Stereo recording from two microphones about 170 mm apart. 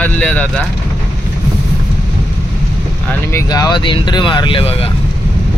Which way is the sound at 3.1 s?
15° left (ahead or behind).